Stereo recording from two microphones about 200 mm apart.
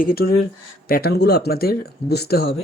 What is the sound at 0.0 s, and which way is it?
Speech, 50° left (ahead or behind).